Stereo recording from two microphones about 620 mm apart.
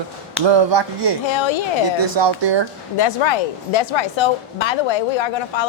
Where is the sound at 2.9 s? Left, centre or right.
Left.